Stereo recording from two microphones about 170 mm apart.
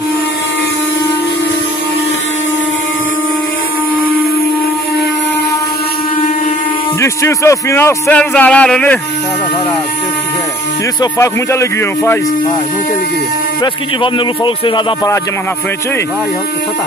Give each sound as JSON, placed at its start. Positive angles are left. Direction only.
{"t": 7.0, "sound": "speech", "side_deg": 15}
{"t": 11.0, "sound": "speech", "side_deg": 15}
{"t": 14.0, "sound": "speech", "side_deg": 30}